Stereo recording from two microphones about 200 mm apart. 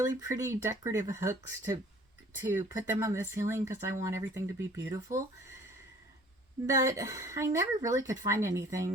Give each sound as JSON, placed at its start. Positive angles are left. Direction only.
{"t": 0.0, "sound": "speech", "side_deg": -15}
{"t": 6.7, "sound": "speech", "side_deg": -15}